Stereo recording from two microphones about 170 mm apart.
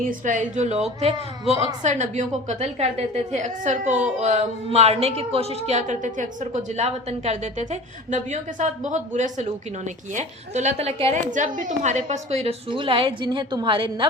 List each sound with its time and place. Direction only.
0.0 s a woman's voice: 50° right (ahead or behind); by 14.1 s 30° right (ahead or behind)